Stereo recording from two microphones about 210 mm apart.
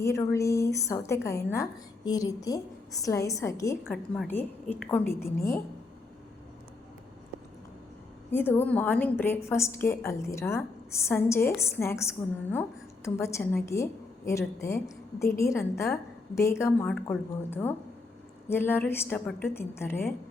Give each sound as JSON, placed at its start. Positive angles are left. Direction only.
{"t": 0.0, "sound": "a woman's voice", "side_deg": 15}
{"t": 3.9, "sound": "a woman's voice", "side_deg": 5}
{"t": 8.3, "sound": "a woman's voice", "side_deg": 10}
{"t": 13.1, "sound": "a woman's voice", "side_deg": 10}